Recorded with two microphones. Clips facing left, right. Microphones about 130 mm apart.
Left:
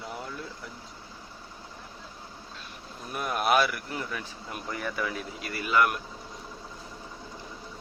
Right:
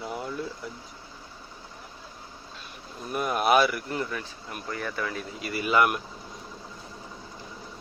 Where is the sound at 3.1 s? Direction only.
Centre (ahead or behind).